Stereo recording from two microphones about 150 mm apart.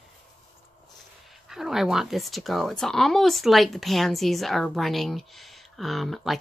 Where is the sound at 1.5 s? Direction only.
Centre (ahead or behind).